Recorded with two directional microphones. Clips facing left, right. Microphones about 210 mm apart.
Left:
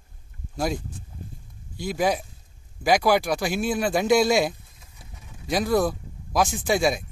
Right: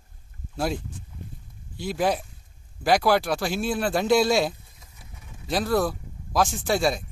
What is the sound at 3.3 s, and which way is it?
Speech, 15° left (ahead or behind).